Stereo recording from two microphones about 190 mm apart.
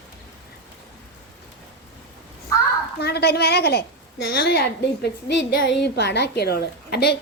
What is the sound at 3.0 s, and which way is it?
A woman's voice, 60° left (ahead or behind).